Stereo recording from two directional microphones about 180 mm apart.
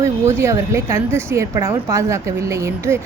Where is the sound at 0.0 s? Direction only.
15° right (ahead or behind).